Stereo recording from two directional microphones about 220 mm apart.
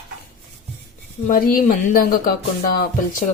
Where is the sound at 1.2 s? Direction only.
40° left (ahead or behind).